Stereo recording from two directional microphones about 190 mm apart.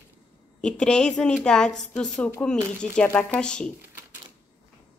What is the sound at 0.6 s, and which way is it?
Speech, 5° left (ahead or behind).